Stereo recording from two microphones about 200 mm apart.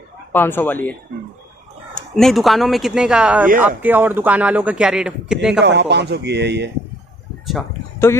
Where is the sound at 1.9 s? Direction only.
Centre (ahead or behind).